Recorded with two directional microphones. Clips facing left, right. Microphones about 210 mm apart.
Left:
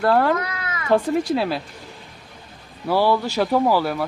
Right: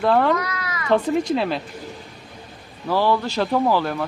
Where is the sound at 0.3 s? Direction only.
25° left (ahead or behind).